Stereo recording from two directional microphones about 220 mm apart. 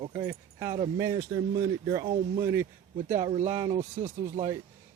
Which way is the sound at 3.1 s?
30° right (ahead or behind).